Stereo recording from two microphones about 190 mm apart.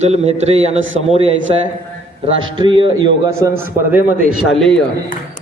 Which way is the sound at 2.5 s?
25° right (ahead or behind).